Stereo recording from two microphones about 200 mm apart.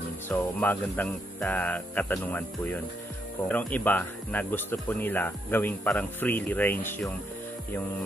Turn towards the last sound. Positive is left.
turn(degrees=10)  # may be behind; listen again after turning